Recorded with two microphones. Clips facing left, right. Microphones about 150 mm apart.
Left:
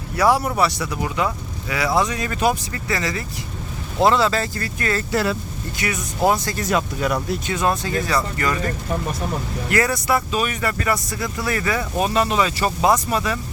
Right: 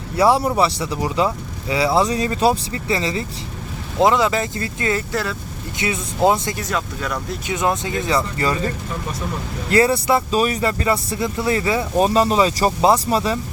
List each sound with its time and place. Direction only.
0.2 s speech: 30° right (ahead or behind)
5.1 s speech: 5° left (ahead or behind)
5.7 s speech: 20° right (ahead or behind)
6.7 s speech: 15° left (ahead or behind)
7.4 s speech: 20° right (ahead or behind)
11.9 s speech: 35° right (ahead or behind)